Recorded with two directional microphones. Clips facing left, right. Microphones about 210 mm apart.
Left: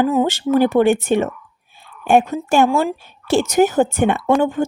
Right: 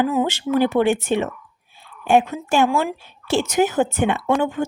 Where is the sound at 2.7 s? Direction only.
35° left (ahead or behind).